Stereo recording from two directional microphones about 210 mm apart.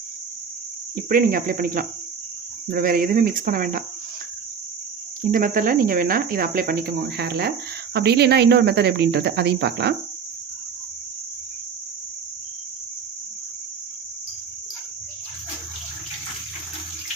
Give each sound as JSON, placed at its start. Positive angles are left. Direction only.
{"t": 0.9, "sound": "speech", "side_deg": -45}
{"t": 5.2, "sound": "speech", "side_deg": -40}